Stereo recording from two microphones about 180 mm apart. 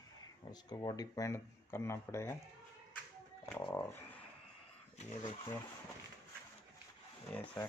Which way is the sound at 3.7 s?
10° left (ahead or behind).